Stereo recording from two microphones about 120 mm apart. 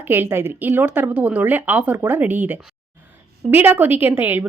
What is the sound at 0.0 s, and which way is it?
A woman's voice, 20° right (ahead or behind).